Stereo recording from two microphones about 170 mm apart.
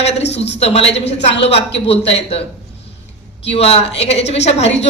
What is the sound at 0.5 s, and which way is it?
A woman's voice, 35° left (ahead or behind).